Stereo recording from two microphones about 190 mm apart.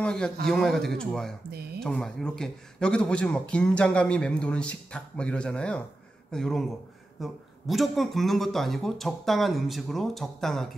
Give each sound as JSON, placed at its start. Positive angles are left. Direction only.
{"t": 0.0, "sound": "a man's voice", "side_deg": 5}
{"t": 1.5, "sound": "speech", "side_deg": -55}
{"t": 1.8, "sound": "speech", "side_deg": 5}